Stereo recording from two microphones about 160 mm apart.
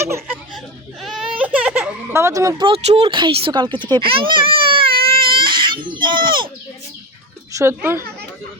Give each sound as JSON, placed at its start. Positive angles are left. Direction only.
{"t": 1.0, "sound": "baby cry", "side_deg": -5}
{"t": 2.6, "sound": "speech", "side_deg": -35}
{"t": 5.0, "sound": "baby cry", "side_deg": -35}
{"t": 7.5, "sound": "speech", "side_deg": -15}